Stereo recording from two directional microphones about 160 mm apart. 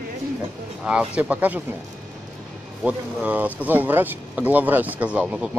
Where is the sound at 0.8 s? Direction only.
5° right (ahead or behind).